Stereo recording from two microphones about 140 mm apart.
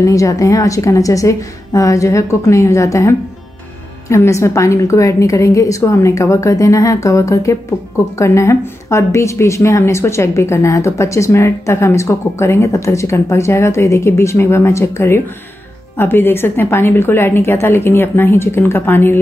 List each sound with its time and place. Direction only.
0.0 s a woman's voice: 25° left (ahead or behind)